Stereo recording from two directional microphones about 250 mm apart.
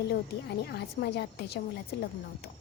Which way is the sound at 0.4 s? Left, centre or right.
Left.